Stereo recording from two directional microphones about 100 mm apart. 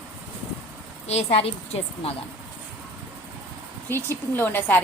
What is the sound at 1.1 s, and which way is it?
A woman's voice, 85° left.